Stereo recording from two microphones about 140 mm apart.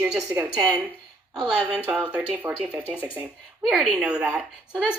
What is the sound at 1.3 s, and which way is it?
Speech, 5° right (ahead or behind).